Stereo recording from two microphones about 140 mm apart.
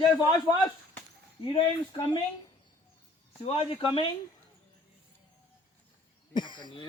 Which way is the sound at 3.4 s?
40° left (ahead or behind).